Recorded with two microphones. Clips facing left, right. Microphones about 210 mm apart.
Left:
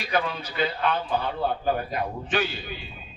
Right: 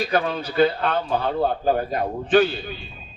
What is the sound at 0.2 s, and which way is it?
Speech, 55° right (ahead or behind).